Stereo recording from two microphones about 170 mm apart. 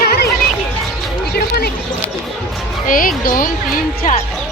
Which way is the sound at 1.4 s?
70° left (ahead or behind).